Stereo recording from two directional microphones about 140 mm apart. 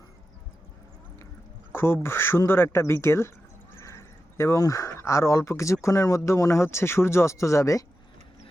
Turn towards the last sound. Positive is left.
turn(degrees=20)  # may be behind; listen again after turning